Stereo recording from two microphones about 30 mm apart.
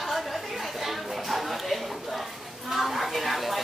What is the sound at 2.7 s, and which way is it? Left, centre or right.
Speech, centre.